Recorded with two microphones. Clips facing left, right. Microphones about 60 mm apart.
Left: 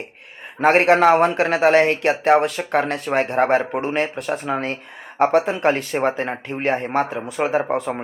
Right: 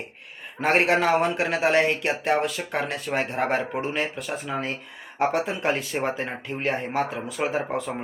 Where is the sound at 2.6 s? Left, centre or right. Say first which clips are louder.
Left 7 dB; left.